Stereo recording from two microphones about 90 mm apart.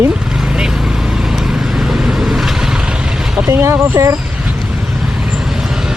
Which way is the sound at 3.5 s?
30° right (ahead or behind).